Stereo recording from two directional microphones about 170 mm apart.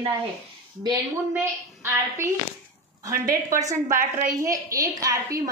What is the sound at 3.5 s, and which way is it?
A woman's voice, 20° right (ahead or behind).